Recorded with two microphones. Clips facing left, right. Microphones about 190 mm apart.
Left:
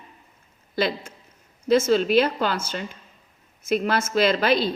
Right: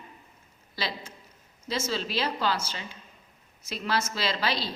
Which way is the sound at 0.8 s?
55° left (ahead or behind).